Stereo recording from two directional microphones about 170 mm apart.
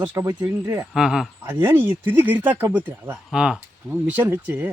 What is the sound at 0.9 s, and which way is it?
Speech, 5° right (ahead or behind).